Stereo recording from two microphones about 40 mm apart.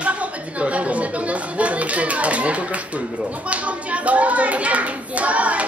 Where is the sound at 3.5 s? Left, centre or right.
Right.